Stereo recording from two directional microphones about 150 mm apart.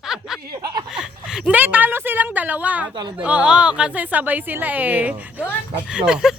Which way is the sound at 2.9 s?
30° right (ahead or behind).